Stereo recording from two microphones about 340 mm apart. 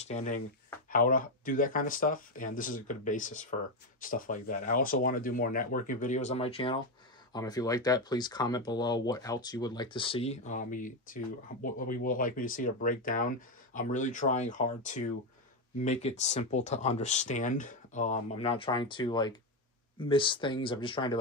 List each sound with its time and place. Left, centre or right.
0.0 s speech: centre